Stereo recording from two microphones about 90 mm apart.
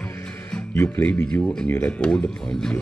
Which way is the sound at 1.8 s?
10° left (ahead or behind).